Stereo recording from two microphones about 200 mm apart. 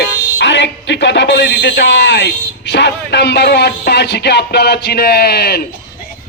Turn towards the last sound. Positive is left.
turn(degrees=55)  # may be behind; listen again after turning